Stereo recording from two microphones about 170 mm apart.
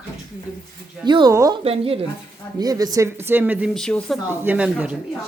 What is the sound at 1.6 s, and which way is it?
Speech, 35° right (ahead or behind).